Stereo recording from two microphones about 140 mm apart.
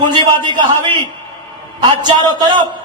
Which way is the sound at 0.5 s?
30° right (ahead or behind).